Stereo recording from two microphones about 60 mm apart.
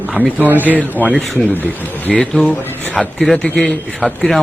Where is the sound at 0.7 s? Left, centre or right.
Left.